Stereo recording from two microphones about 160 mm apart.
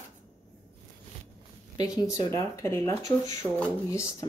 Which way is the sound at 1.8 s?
20° left (ahead or behind).